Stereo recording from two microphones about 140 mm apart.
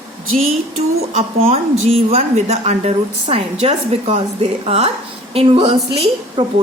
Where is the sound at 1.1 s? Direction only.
45° right (ahead or behind).